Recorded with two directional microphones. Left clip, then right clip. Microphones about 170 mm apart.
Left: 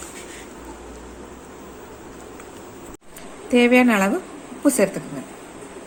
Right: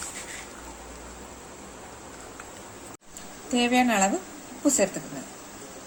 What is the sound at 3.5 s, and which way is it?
A woman's voice, 20° left (ahead or behind).